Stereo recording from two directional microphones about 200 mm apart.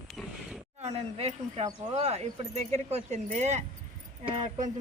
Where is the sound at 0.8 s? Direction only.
30° right (ahead or behind).